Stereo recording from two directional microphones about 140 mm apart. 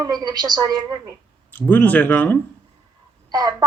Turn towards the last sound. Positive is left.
turn(degrees=-30)  # may be behind; listen again after turning